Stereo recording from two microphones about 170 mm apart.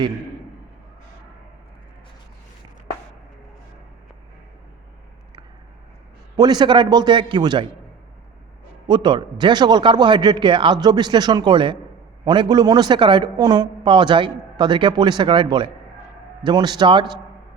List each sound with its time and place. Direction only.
6.3 s a woman's voice: 25° right (ahead or behind)
8.9 s a woman's voice: 30° right (ahead or behind)